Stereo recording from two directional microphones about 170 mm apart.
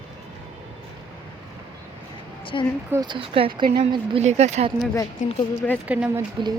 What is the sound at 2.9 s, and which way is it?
Speech, 25° right (ahead or behind).